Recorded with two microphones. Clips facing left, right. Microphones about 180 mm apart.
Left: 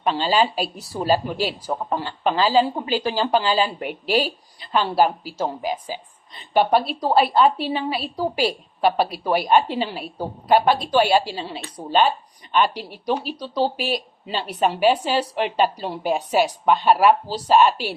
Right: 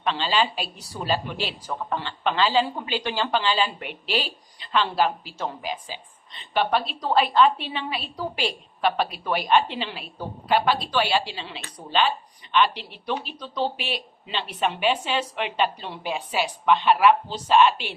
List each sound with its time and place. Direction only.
0.1 s speech: 40° left (ahead or behind)